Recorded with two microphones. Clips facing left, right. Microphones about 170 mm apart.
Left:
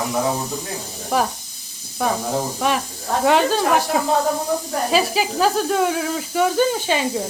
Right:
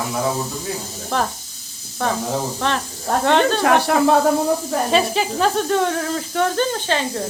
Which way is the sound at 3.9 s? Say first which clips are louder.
Right 4 dB; 75° right (ahead or behind).